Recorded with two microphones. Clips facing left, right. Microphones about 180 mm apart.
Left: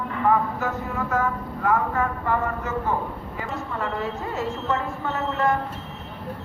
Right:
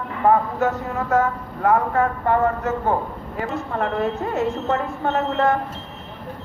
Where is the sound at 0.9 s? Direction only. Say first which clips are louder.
Right 4 dB; 65° right (ahead or behind).